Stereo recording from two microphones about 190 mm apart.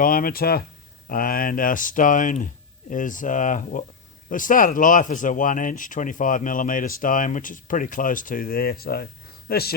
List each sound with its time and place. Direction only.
0.0 s speech: 50° left (ahead or behind)